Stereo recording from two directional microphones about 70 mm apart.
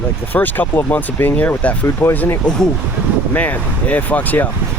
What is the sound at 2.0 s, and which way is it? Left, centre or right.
Speech, left.